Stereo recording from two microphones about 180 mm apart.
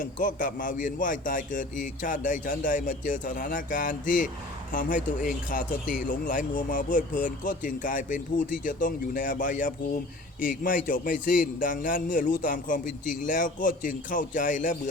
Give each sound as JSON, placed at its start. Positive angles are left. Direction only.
{"t": 0.0, "sound": "speech", "side_deg": 50}